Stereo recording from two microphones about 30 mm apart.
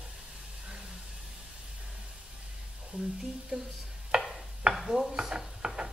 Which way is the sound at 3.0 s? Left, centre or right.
Centre.